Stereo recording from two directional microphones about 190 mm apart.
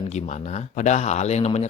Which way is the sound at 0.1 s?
40° left (ahead or behind).